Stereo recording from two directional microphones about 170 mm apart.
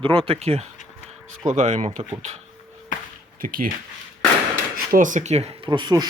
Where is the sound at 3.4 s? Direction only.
55° right (ahead or behind).